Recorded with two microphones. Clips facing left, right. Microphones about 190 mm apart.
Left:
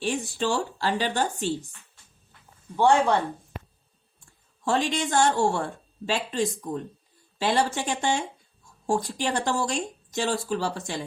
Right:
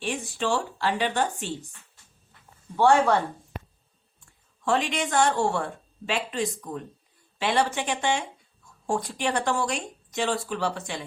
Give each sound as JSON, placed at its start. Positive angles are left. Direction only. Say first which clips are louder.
{"t": 0.0, "sound": "a woman's voice", "louder": "left 2 dB", "side_deg": 35}
{"t": 2.7, "sound": "speech", "louder": "right 1 dB", "side_deg": 20}
{"t": 4.6, "sound": "a woman's voice", "louder": "even", "side_deg": 35}